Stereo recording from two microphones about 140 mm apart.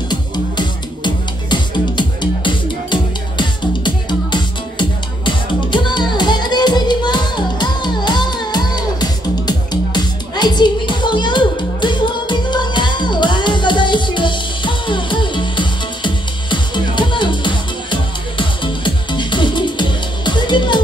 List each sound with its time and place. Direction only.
0.1 s music: 30° left (ahead or behind)